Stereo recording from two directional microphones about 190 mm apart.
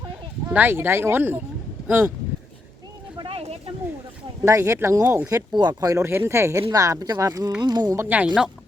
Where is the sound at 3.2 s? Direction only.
30° right (ahead or behind).